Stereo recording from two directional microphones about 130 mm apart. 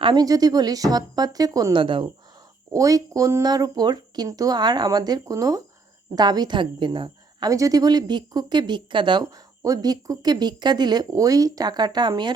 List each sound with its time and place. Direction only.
0.0 s speech: 35° right (ahead or behind)
1.7 s a woman's voice: 40° right (ahead or behind)
2.7 s a woman's voice: 25° right (ahead or behind)